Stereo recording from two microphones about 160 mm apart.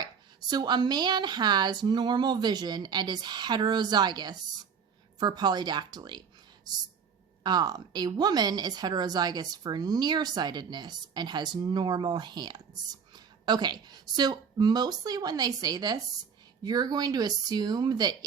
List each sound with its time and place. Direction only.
0.5 s a woman's voice: 25° right (ahead or behind)
7.4 s a woman's voice: 25° right (ahead or behind)